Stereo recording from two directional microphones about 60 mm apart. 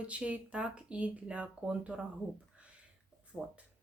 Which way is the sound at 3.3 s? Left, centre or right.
Centre.